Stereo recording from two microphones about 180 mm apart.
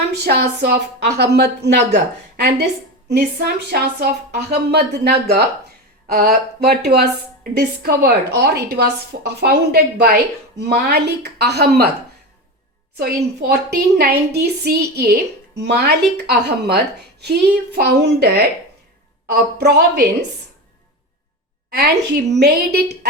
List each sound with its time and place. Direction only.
0.1 s a woman's voice: 65° right (ahead or behind)
13.4 s a woman's voice: 60° right (ahead or behind)
21.8 s a woman's voice: 60° right (ahead or behind)